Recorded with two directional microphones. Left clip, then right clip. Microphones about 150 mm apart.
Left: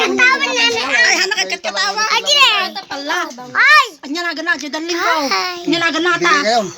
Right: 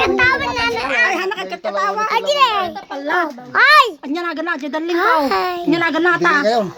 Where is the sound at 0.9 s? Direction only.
60° right (ahead or behind).